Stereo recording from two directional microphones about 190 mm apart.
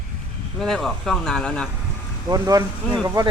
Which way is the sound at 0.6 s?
Centre (ahead or behind).